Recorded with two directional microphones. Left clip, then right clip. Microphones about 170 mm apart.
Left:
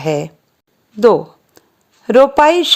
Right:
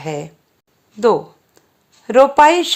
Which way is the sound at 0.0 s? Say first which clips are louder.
Left 7 dB; 35° left (ahead or behind).